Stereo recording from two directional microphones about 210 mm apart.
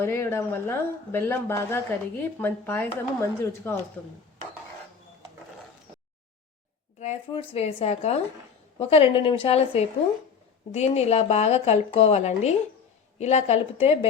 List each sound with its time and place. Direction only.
0.0 s speech: 10° left (ahead or behind)
7.0 s a woman's voice: 30° left (ahead or behind)